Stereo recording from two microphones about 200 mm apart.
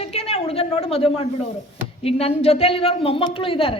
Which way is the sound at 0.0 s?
30° left (ahead or behind).